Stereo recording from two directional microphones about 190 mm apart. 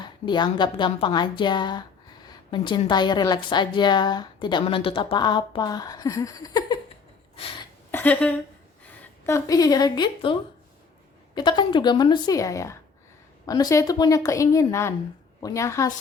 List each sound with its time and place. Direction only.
0.0 s a woman's voice: 25° left (ahead or behind)
7.9 s a woman's voice: 10° left (ahead or behind); by 10.3 s 25° left (ahead or behind)
11.3 s a woman's voice: 25° left (ahead or behind)